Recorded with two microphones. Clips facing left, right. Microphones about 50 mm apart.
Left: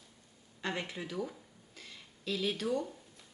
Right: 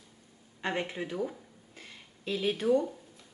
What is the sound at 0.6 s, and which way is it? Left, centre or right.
Speech, right.